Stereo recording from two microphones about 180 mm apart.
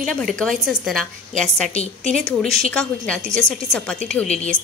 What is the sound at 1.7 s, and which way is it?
Speech, 35° left (ahead or behind).